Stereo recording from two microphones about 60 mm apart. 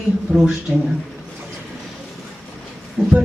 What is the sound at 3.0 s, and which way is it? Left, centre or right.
Speech, right.